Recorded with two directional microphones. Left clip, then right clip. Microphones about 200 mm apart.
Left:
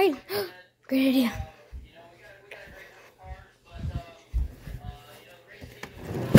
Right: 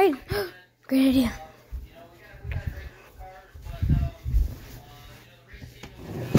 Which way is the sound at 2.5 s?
20° left (ahead or behind).